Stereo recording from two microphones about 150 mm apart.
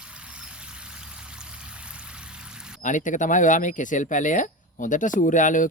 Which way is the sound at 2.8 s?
55° left (ahead or behind).